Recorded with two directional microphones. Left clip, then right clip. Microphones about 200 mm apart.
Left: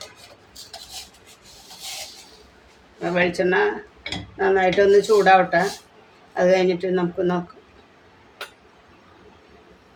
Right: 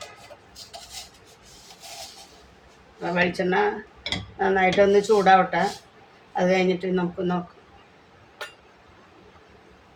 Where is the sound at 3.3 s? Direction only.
40° left (ahead or behind).